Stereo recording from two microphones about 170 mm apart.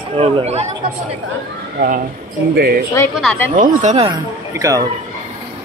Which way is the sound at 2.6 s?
65° right (ahead or behind).